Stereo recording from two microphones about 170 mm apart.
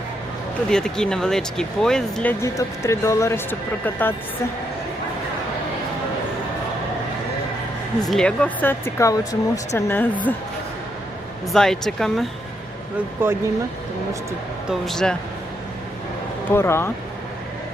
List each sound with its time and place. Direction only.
0.7 s speech: 5° left (ahead or behind)
2.4 s speech: 15° left (ahead or behind)
8.0 s speech: 5° left (ahead or behind)
11.5 s speech: 5° left (ahead or behind)
13.2 s speech: 15° right (ahead or behind)
14.7 s speech: centre (ahead or behind)
16.5 s speech: 15° left (ahead or behind)